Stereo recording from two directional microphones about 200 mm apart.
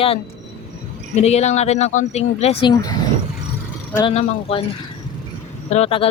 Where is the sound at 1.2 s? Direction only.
35° left (ahead or behind).